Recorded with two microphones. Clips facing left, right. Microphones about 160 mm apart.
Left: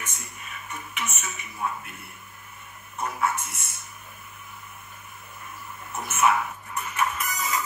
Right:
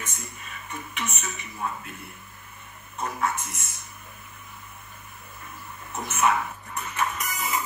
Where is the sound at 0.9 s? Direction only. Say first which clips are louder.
Even; 10° left (ahead or behind).